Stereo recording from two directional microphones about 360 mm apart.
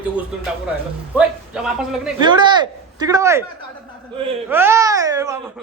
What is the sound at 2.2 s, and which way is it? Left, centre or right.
Speech, centre.